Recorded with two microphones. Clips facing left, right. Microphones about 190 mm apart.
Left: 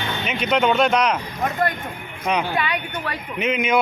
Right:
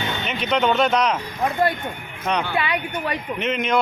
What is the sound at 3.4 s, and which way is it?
Speech, centre (ahead or behind).